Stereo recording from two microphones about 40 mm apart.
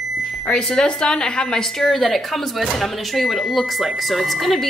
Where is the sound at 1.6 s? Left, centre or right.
Centre.